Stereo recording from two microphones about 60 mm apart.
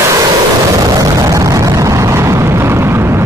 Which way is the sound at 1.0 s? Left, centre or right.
Right.